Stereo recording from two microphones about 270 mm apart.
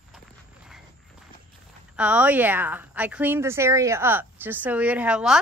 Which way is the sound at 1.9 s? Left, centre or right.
Centre.